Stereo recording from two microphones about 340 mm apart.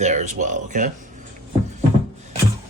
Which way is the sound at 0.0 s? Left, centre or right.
Centre.